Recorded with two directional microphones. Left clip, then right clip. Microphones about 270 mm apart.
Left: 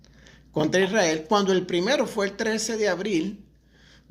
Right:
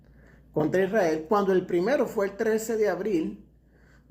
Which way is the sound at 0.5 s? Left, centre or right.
Left.